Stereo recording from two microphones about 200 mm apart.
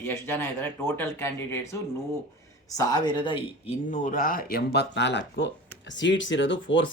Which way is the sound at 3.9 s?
40° left (ahead or behind).